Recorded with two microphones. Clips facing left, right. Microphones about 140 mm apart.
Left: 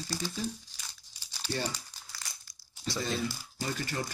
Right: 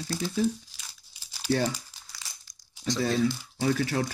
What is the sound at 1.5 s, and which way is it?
Speech, 70° right (ahead or behind).